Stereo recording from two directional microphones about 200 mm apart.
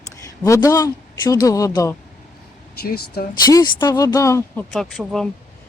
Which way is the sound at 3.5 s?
20° left (ahead or behind).